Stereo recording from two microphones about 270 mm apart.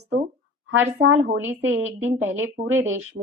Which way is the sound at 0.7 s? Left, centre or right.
Right.